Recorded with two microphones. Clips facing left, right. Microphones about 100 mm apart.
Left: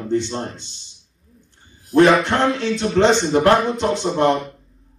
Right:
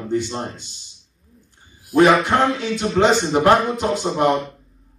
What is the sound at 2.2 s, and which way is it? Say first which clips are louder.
Speech: even; 10° right (ahead or behind).